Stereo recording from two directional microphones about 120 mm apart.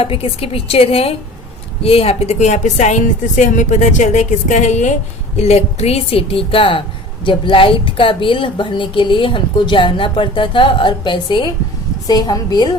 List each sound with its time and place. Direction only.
0.0 s a woman's voice: 50° left (ahead or behind); by 4.9 s 80° left
5.4 s a woman's voice: 60° left (ahead or behind); by 12.7 s 35° left (ahead or behind)